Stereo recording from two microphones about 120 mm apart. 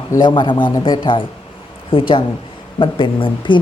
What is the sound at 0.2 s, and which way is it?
Speech, 40° left (ahead or behind).